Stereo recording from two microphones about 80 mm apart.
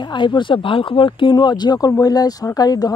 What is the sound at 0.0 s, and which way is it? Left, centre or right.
Speech, left.